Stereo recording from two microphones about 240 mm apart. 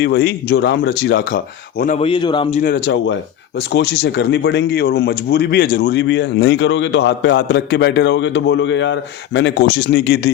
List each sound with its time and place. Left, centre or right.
0.0 s speech: left
1.8 s a man's voice: left
2.6 s speech: left